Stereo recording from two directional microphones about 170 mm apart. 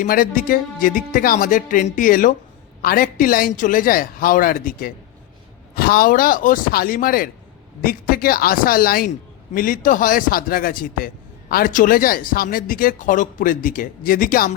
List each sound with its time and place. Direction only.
0.0 s a man's voice: 55° left (ahead or behind)